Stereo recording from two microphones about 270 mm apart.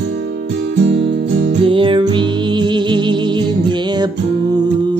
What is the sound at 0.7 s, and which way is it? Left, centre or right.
Music, right.